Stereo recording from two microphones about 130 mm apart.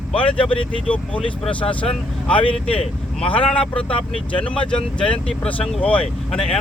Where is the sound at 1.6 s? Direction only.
40° left (ahead or behind).